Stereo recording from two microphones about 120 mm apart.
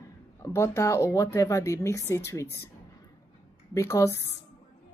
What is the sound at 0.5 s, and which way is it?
Speech, 20° left (ahead or behind).